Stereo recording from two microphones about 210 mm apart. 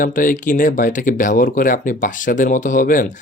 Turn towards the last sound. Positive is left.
turn(degrees=40)  # may be behind; listen again after turning